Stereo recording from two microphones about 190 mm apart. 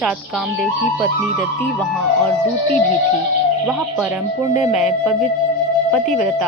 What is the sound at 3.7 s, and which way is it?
A woman's voice, 10° right (ahead or behind).